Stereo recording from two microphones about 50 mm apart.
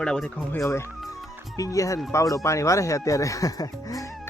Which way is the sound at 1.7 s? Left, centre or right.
Left.